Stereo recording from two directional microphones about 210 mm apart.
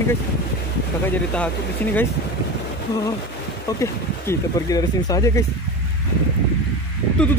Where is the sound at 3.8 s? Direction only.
15° left (ahead or behind).